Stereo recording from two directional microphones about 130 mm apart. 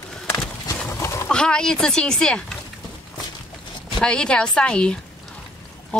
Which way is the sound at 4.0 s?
5° left (ahead or behind).